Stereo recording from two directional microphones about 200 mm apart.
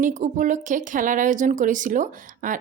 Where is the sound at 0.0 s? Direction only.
40° right (ahead or behind).